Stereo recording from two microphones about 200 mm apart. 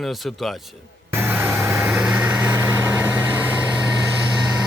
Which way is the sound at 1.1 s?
10° right (ahead or behind).